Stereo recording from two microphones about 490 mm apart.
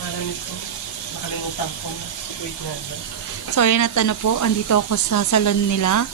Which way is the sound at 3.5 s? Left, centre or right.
Left.